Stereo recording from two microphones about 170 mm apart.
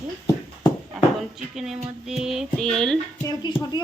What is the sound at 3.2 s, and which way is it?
Speech, 25° left (ahead or behind).